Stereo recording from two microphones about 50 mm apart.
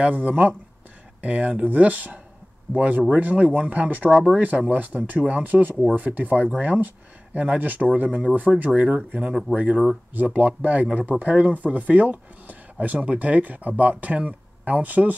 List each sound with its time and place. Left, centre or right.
0.0 s speech: right
4.1 s speech: centre
4.4 s speech: right